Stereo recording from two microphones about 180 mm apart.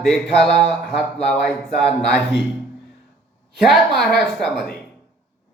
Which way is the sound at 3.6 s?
Centre (ahead or behind).